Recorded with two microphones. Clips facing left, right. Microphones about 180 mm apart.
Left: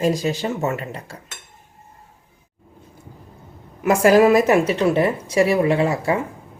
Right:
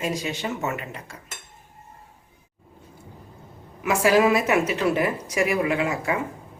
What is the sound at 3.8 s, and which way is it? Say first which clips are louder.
A woman's voice: left 5 dB; 45° left (ahead or behind).